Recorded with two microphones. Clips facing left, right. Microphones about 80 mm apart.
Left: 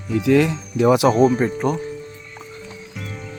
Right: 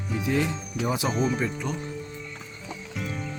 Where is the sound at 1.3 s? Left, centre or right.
Left.